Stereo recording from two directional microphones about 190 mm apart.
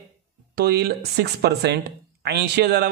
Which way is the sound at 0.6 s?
55° right (ahead or behind).